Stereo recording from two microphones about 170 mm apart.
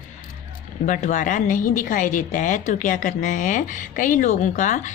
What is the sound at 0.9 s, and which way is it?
A woman's voice, 45° left (ahead or behind).